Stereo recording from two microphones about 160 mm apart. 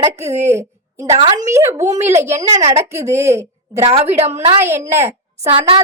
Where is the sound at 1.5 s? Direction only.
15° right (ahead or behind).